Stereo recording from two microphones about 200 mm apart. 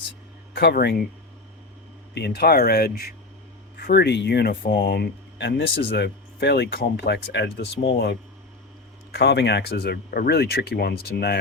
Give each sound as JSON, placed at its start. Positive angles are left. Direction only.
{"t": 0.5, "sound": "speech", "side_deg": 55}
{"t": 2.1, "sound": "speech", "side_deg": 55}
{"t": 9.1, "sound": "speech", "side_deg": 55}